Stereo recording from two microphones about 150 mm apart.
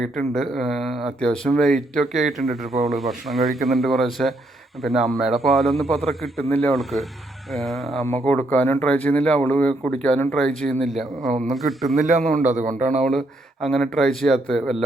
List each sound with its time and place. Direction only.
0.0 s speech: centre (ahead or behind)
11.3 s a man's voice: 55° right (ahead or behind)
11.5 s speech: centre (ahead or behind)
11.9 s a man's voice: 55° right (ahead or behind)
13.1 s speech: centre (ahead or behind)